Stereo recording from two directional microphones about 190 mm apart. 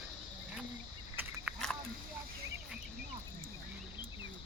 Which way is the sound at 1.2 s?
10° right (ahead or behind).